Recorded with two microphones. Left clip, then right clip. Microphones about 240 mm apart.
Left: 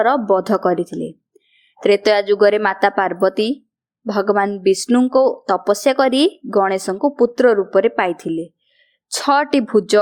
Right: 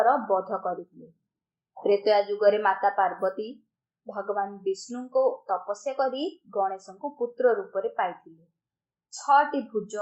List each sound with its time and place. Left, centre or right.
0.0 s speech: left
1.8 s speech: left